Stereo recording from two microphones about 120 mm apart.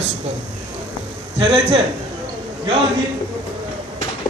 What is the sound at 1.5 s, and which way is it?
Speech, 60° right (ahead or behind).